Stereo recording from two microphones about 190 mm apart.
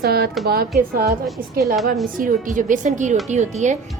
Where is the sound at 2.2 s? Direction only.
45° right (ahead or behind).